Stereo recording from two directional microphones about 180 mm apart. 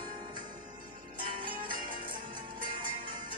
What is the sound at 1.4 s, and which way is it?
Music, 50° right (ahead or behind).